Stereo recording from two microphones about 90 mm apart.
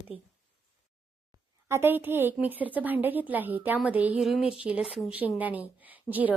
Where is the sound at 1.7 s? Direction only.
25° right (ahead or behind).